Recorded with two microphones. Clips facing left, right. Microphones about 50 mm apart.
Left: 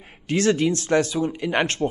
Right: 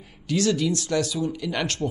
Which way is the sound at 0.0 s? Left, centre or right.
Left.